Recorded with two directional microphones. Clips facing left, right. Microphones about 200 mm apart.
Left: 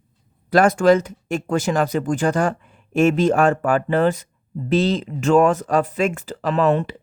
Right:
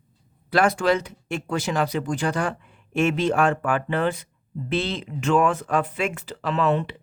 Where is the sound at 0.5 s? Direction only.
45° left (ahead or behind).